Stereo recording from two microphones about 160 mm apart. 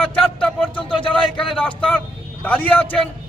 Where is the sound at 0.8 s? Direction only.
30° left (ahead or behind).